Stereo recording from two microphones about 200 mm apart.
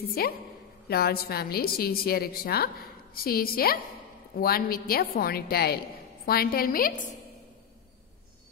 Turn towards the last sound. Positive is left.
turn(degrees=45)  # may be behind; listen again after turning